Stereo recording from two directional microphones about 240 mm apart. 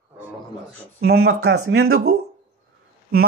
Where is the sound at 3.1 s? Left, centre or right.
Right.